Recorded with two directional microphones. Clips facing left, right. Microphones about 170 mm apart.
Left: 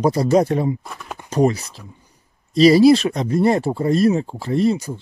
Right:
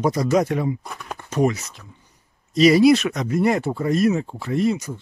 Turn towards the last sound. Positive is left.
turn(degrees=30)  # may be behind; listen again after turning